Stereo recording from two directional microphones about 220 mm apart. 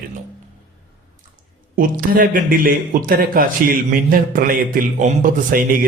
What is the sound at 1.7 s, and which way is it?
Speech, 40° right (ahead or behind).